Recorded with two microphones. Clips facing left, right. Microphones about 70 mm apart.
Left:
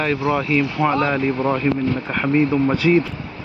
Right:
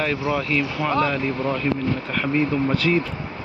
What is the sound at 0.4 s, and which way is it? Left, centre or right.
Speech, centre.